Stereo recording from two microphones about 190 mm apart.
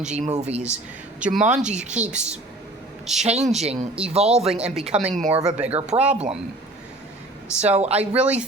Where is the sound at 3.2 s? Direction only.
35° right (ahead or behind).